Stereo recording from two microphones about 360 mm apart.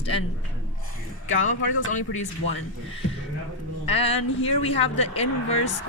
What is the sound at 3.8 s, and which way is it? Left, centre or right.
Speech, centre.